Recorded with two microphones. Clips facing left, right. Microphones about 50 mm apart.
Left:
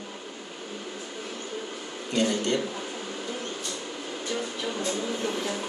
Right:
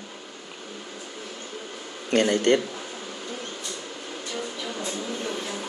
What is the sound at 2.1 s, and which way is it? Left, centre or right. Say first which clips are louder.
Speech: right 5 dB; right.